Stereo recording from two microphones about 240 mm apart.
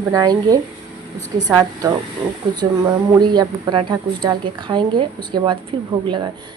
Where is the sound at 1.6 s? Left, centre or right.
Centre.